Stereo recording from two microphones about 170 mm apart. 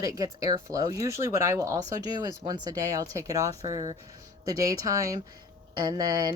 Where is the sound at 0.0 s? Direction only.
20° right (ahead or behind).